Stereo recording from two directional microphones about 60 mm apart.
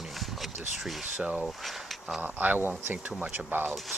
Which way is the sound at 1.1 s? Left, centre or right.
Centre.